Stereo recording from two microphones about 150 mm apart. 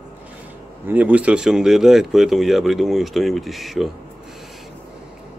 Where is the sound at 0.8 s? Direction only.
10° right (ahead or behind).